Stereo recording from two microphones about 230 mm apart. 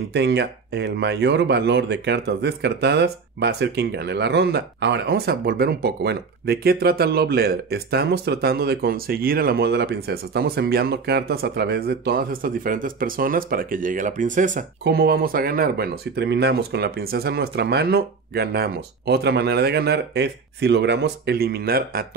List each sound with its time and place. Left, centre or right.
0.1 s speech: right